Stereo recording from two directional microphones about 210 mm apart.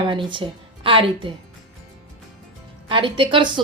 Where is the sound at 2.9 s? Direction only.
25° right (ahead or behind).